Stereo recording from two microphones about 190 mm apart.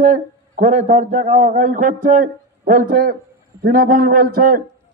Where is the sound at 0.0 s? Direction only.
40° right (ahead or behind).